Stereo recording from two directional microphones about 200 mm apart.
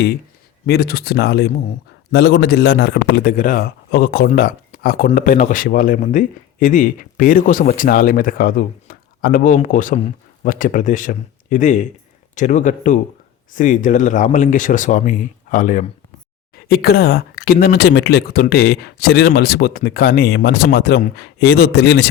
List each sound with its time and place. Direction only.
0.6 s speech: 50° left (ahead or behind)
3.3 s speech: 45° left (ahead or behind); by 22.1 s 60° left (ahead or behind)